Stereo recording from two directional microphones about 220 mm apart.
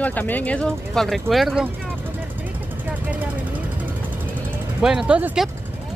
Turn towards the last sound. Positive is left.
turn(degrees=-5)  # may be behind; listen again after turning